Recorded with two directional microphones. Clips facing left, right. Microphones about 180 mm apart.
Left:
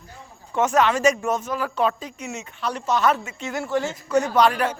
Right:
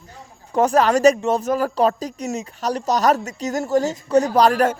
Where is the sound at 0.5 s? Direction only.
35° right (ahead or behind).